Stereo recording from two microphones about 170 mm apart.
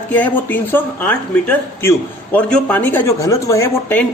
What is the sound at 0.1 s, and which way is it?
A woman's voice, 10° left (ahead or behind).